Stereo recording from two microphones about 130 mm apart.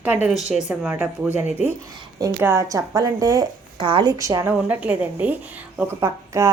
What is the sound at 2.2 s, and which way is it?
Speech, 20° right (ahead or behind).